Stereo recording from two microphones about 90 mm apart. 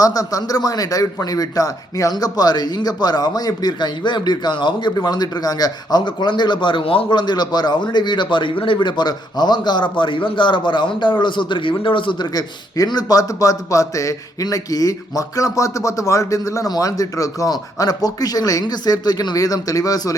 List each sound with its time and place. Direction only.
0.0 s a man's voice: 40° left (ahead or behind)
10.0 s a man's voice: 65° left (ahead or behind)
12.3 s a man's voice: 45° left (ahead or behind)